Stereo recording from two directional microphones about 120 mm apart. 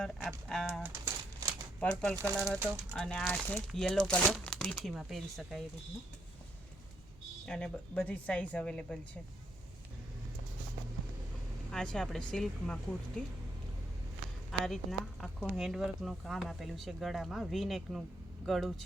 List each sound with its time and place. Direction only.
0.0 s speech: 5° left (ahead or behind)
0.8 s crumpling: 25° right (ahead or behind)
1.8 s a woman's voice: 10° left (ahead or behind)
2.1 s speech: 25° right (ahead or behind)
2.9 s a woman's voice: 10° left (ahead or behind)
7.4 s a woman's voice: 10° left (ahead or behind)
11.7 s speech: 5° left (ahead or behind)
14.6 s speech: centre (ahead or behind)